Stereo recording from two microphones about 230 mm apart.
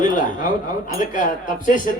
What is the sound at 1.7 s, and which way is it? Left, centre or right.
Speech, left.